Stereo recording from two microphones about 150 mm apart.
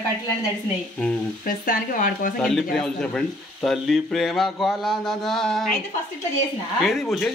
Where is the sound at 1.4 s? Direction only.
70° left (ahead or behind).